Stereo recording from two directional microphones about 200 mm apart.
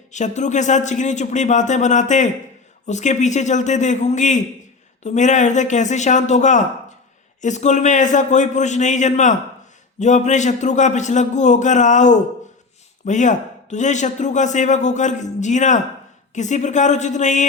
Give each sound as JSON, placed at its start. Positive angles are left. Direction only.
{"t": 0.1, "sound": "a man's voice", "side_deg": 35}